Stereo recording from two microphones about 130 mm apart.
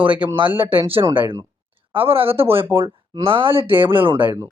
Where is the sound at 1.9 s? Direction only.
45° right (ahead or behind).